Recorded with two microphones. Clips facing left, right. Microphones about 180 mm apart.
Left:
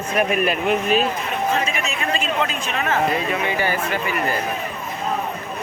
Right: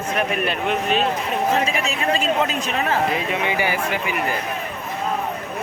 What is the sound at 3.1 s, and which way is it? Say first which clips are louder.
Speech: even; 15° right (ahead or behind).